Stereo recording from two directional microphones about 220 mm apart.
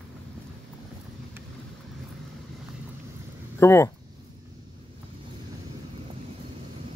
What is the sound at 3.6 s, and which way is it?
Speech, 10° left (ahead or behind).